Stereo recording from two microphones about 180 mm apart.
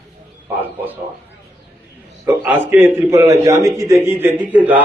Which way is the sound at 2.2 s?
10° right (ahead or behind).